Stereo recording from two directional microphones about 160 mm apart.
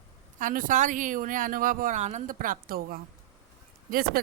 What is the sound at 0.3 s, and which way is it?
Speech, 55° right (ahead or behind).